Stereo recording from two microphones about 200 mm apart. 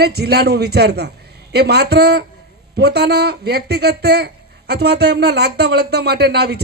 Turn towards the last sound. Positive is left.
turn(degrees=-55)  # may be behind; listen again after turning